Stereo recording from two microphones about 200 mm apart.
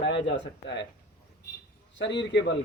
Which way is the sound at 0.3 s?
60° left (ahead or behind).